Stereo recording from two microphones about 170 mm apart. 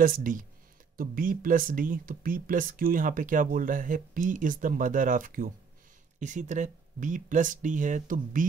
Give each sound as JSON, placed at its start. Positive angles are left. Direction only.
{"t": 0.0, "sound": "speech", "side_deg": -55}